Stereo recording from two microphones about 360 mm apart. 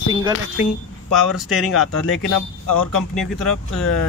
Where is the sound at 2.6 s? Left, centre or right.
Left.